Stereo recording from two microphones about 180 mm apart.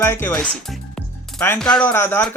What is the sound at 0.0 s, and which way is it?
Speech, 10° left (ahead or behind).